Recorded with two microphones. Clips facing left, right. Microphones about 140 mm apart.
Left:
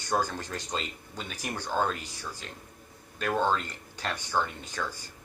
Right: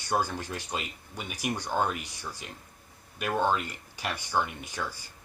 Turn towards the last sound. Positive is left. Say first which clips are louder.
# left 1 dB
turn(degrees=-10)  # may be behind; listen again after turning